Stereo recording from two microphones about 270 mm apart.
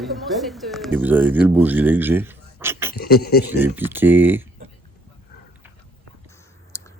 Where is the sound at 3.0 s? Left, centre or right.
Left.